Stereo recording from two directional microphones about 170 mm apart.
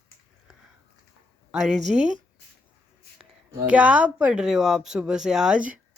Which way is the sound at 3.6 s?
5° right (ahead or behind).